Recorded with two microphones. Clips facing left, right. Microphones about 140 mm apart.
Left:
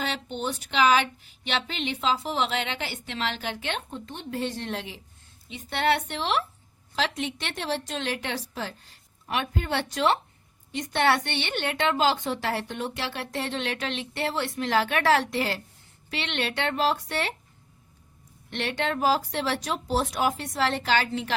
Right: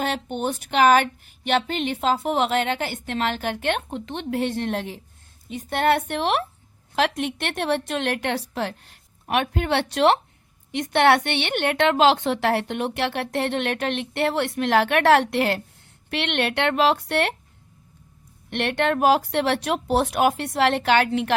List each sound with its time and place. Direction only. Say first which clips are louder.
0.0 s a woman's voice: right 5 dB; 50° right (ahead or behind)
18.5 s a woman's voice: right 6 dB; 60° right (ahead or behind)